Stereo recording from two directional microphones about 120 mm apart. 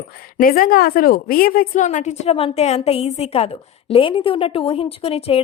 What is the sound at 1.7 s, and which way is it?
A woman's voice, 90° left.